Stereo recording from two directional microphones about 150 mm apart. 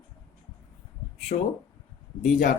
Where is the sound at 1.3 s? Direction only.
55° left (ahead or behind).